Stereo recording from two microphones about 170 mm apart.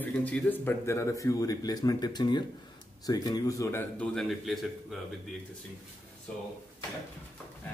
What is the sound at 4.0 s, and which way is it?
A man's voice, 5° left (ahead or behind).